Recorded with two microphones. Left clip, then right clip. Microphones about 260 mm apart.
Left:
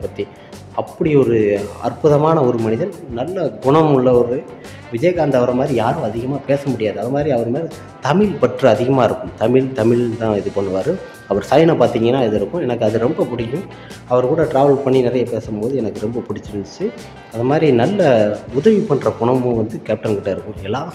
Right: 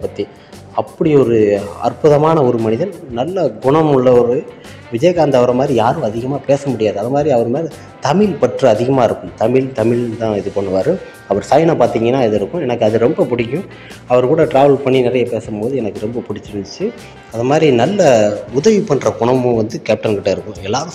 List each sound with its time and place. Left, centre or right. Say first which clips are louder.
0.2 s speech: right 2 dB; centre
14.0 s speech: right 3 dB; centre